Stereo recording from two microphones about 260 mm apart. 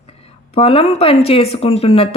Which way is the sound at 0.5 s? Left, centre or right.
Left.